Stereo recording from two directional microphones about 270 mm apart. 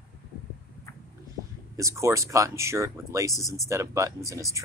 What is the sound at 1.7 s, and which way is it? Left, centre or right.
Speech, centre.